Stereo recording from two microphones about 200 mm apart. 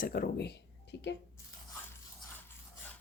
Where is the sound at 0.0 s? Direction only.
45° left (ahead or behind).